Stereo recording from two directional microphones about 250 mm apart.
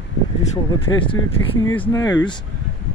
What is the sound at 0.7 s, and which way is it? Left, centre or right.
Speech, centre.